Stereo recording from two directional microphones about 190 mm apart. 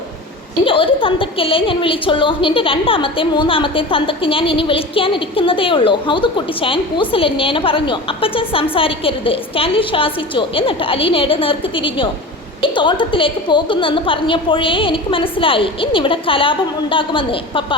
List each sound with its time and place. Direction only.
0.6 s a woman's voice: 25° left (ahead or behind)